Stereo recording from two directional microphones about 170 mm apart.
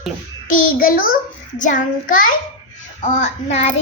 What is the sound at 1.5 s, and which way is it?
A child's voice, 50° left (ahead or behind).